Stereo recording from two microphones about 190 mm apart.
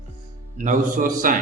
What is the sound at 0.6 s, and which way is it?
Speech, 40° right (ahead or behind).